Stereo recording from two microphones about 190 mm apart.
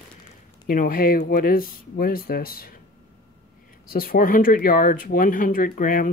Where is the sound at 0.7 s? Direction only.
45° left (ahead or behind).